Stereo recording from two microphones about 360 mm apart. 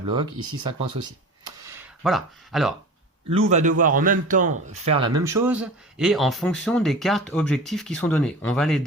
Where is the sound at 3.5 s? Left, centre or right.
Centre.